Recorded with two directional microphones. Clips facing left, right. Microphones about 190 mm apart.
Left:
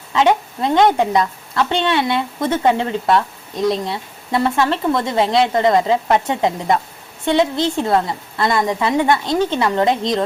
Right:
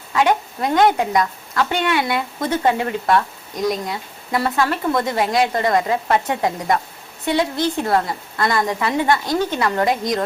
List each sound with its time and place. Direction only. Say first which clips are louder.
0.1 s a woman's voice: left 2 dB; 25° left (ahead or behind)